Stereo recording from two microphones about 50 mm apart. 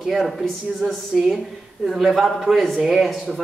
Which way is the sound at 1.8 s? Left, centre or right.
Centre.